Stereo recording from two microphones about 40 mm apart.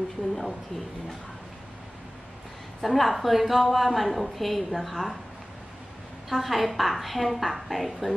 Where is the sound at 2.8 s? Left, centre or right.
Centre.